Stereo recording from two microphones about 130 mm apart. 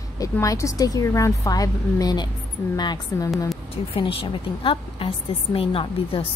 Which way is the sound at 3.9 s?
45° left (ahead or behind).